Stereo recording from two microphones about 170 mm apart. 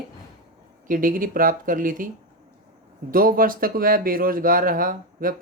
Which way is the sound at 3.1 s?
55° right (ahead or behind).